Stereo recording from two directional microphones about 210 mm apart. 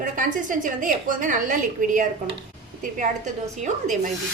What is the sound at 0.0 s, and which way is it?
A woman's voice, 40° right (ahead or behind).